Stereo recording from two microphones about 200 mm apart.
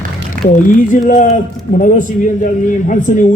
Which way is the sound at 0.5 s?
40° left (ahead or behind).